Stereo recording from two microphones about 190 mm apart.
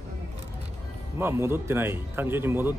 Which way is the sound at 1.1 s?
15° right (ahead or behind).